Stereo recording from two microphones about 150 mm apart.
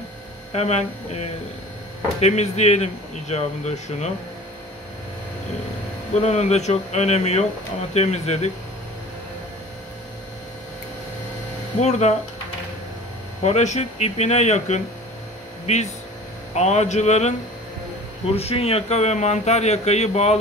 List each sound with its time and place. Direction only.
0.5 s speech: 45° left (ahead or behind)
6.2 s speech: 45° left (ahead or behind)
11.8 s speech: 50° left (ahead or behind)
13.4 s speech: 50° left (ahead or behind)
18.3 s speech: 40° left (ahead or behind)